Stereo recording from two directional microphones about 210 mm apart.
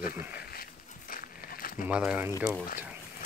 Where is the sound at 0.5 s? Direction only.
45° left (ahead or behind).